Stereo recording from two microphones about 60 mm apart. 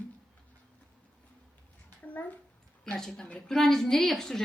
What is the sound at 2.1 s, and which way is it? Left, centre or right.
Speech, left.